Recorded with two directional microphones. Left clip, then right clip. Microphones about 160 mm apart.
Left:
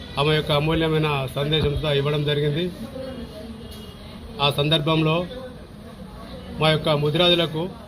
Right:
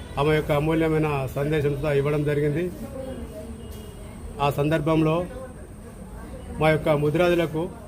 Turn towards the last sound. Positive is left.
turn(degrees=-10)  # may be behind; listen again after turning